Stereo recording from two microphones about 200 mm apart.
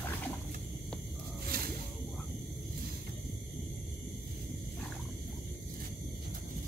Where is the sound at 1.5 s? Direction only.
45° right (ahead or behind).